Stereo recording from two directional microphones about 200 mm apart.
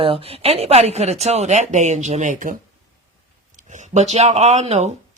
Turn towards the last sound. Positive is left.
turn(degrees=-35)  # may be behind; listen again after turning